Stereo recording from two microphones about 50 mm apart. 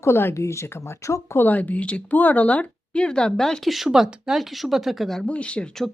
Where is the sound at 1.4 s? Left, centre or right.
Left; by 3.7 s centre.